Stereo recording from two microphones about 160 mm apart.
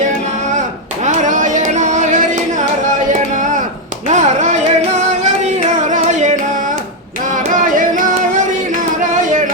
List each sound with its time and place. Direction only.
1.0 s a sound: 50° right (ahead or behind)
4.1 s music: 45° right (ahead or behind)
7.7 s music: 55° right (ahead or behind)